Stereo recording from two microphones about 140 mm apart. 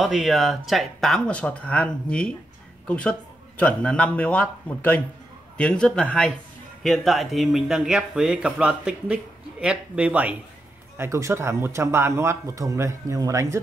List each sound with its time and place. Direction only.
0.0 s speech: centre (ahead or behind)
11.0 s speech: 20° right (ahead or behind)